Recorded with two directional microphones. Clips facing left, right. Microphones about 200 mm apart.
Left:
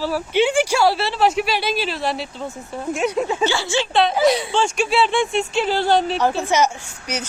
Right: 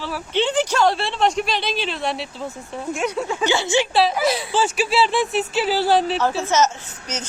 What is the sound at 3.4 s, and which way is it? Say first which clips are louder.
Speech: right 1 dB; 20° right (ahead or behind).